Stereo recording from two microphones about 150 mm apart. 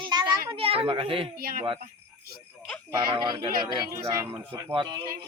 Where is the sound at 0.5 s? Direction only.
40° right (ahead or behind).